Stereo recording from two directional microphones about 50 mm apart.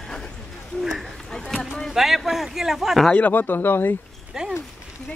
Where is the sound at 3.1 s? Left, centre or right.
Left.